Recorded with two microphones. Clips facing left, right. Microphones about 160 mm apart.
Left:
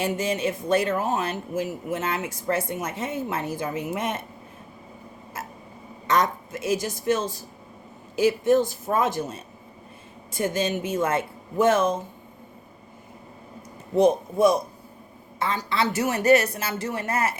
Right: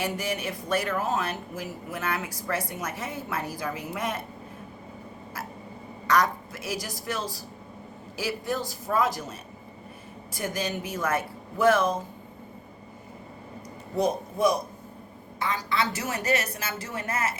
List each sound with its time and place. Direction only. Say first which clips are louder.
0.0 s speech: left 5 dB; 25° left (ahead or behind)
6.1 s speech: left 1 dB; 25° left (ahead or behind)
13.9 s speech: left 7 dB; 25° left (ahead or behind)